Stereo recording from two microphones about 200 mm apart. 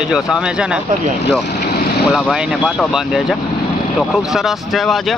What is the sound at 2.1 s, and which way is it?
Speech, centre (ahead or behind).